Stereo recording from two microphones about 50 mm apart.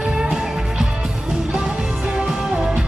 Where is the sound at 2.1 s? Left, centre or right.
Centre.